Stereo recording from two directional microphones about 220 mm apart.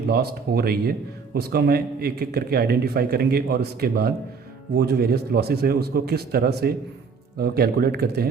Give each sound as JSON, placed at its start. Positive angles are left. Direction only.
{"t": 0.1, "sound": "speech", "side_deg": -45}